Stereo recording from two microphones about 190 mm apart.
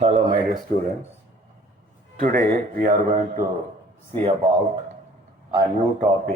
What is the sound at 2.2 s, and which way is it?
Speech, 45° right (ahead or behind).